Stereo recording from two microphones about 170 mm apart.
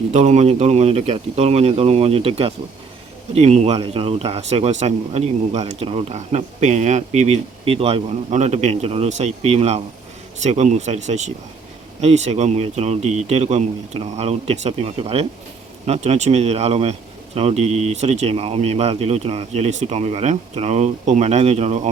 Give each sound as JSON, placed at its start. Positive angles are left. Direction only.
{"t": 0.1, "sound": "speech", "side_deg": -45}